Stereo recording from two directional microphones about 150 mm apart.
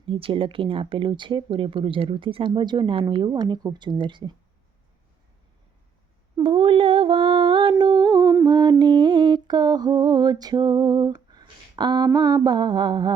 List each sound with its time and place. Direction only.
0.1 s speech: 35° right (ahead or behind)
6.3 s music: 30° right (ahead or behind)
8.8 s a sound: 30° right (ahead or behind)